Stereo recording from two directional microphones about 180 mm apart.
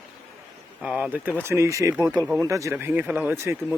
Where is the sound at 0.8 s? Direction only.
5° right (ahead or behind).